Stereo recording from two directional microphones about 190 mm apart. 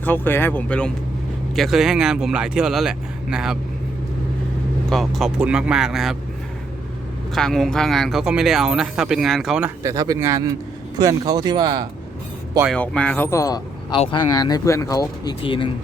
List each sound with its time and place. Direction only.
0.0 s speech: 10° left (ahead or behind)
4.9 s speech: centre (ahead or behind)
7.3 s speech: centre (ahead or behind); by 11.9 s 20° right (ahead or behind)
12.7 s speech: 5° left (ahead or behind); by 15.7 s 25° left (ahead or behind)